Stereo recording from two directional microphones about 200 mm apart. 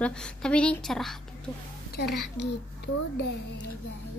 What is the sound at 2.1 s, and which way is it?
A child's voice, 60° left (ahead or behind).